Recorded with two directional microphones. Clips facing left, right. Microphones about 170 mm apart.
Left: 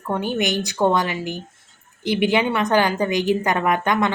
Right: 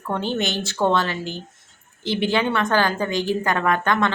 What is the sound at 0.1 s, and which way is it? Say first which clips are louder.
A woman's voice: left 2 dB; 10° left (ahead or behind).